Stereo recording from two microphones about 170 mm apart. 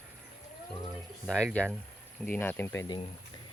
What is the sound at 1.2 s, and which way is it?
Speech, 5° left (ahead or behind).